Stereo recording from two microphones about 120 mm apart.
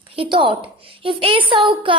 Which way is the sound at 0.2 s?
45° right (ahead or behind).